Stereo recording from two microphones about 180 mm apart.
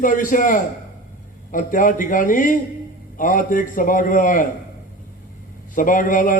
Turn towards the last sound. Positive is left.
turn(degrees=45)  # may be behind; listen again after turning